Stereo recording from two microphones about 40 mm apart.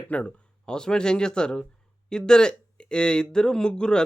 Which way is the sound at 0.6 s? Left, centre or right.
Centre.